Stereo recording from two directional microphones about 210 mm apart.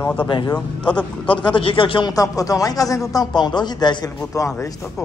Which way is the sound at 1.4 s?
25° left (ahead or behind).